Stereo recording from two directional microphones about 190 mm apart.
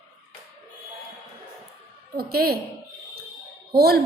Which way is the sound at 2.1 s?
55° right (ahead or behind).